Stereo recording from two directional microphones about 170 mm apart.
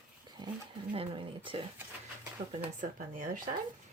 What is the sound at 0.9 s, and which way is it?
Speech, 30° right (ahead or behind).